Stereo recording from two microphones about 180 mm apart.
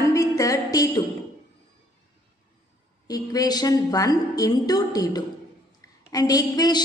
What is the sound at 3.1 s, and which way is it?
A woman's voice, 20° left (ahead or behind).